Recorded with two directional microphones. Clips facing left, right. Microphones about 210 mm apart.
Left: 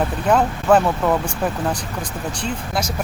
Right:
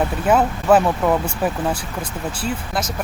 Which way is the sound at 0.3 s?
5° right (ahead or behind).